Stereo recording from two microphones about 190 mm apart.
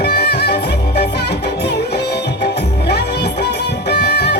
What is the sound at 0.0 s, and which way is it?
Music, 60° left (ahead or behind).